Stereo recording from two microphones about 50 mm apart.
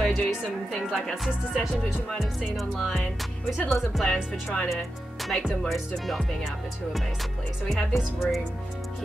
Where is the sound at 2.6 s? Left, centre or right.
Centre.